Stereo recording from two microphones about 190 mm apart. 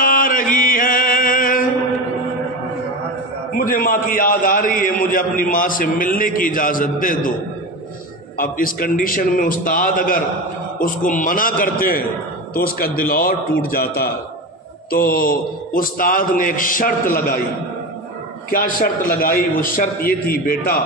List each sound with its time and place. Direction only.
0.0 s mantra: 45° left (ahead or behind)
3.5 s a man's voice: 45° left (ahead or behind)
8.4 s a man's voice: 50° left (ahead or behind)
18.5 s a man's voice: 50° left (ahead or behind)